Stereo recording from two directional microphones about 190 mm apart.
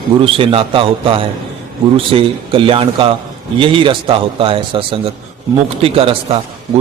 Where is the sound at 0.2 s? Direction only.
30° right (ahead or behind).